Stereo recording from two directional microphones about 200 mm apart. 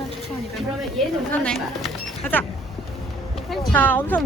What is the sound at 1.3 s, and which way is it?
Speech, 5° left (ahead or behind).